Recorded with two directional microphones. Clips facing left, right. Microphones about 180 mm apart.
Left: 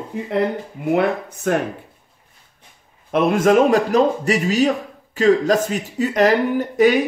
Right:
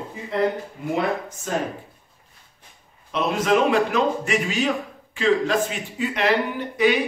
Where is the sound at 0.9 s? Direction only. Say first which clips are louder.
Left 5 dB; 60° left (ahead or behind).